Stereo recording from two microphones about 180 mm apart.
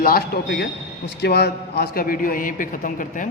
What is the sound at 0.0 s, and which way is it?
Speech, 55° left (ahead or behind).